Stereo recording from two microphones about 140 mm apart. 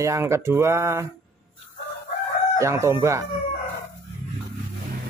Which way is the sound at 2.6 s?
20° right (ahead or behind).